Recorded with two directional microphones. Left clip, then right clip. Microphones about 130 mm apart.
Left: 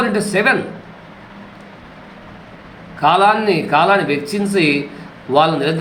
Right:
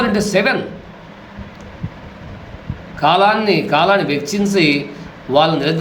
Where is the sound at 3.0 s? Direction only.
15° right (ahead or behind).